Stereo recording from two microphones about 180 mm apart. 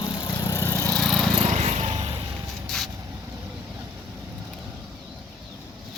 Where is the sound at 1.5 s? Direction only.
40° right (ahead or behind).